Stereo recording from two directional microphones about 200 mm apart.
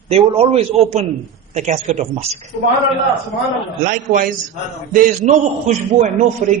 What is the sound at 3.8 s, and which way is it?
A man's voice, 45° right (ahead or behind).